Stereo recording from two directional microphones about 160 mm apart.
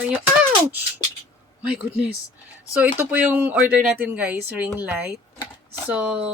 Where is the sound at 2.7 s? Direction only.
10° right (ahead or behind).